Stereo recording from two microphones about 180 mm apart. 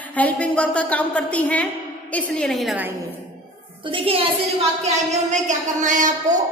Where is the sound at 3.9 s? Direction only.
30° right (ahead or behind).